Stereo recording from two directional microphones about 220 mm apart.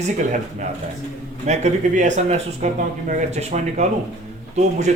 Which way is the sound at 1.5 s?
30° right (ahead or behind).